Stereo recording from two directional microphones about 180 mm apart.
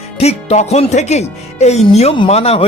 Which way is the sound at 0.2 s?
35° left (ahead or behind).